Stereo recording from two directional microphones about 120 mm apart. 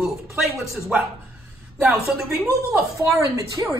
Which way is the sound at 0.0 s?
5° right (ahead or behind).